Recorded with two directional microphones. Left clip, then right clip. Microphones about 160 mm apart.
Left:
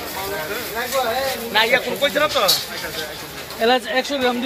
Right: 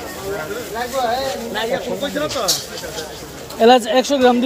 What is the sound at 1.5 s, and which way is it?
Speech, 20° right (ahead or behind).